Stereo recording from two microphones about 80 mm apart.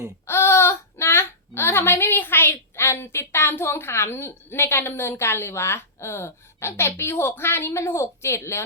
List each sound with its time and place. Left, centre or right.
0.3 s speech: left